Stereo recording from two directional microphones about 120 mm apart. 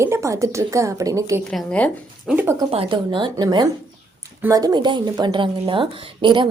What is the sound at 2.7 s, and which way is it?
A woman's voice, 40° right (ahead or behind).